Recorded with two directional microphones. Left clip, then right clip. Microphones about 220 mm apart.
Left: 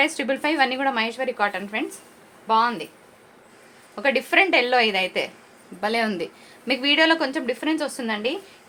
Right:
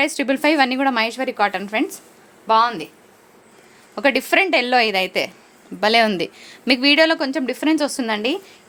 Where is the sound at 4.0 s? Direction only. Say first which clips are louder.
Right 3 dB; 50° right (ahead or behind).